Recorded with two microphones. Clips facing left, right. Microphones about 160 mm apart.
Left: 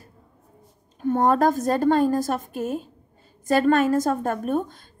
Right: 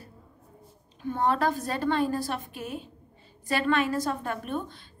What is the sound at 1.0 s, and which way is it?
A woman's voice, 45° left (ahead or behind).